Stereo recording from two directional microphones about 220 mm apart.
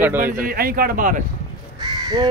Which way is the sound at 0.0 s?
10° right (ahead or behind).